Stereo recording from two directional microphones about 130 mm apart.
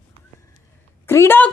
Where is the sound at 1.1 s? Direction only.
20° left (ahead or behind).